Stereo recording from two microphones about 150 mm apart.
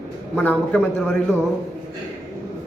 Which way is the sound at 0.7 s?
5° left (ahead or behind).